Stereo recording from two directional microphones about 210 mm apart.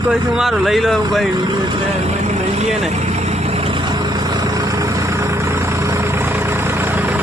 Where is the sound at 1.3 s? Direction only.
20° right (ahead or behind).